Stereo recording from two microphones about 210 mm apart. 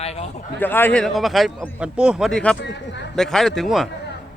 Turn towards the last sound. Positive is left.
turn(degrees=0)  # may be behind; listen again after turning